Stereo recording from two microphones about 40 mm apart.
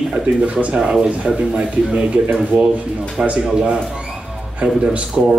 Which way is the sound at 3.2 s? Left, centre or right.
Right.